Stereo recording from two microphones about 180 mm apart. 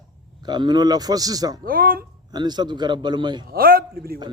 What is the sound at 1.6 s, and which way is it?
Speech, 55° right (ahead or behind).